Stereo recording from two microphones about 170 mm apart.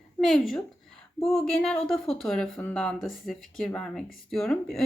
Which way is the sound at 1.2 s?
5° left (ahead or behind).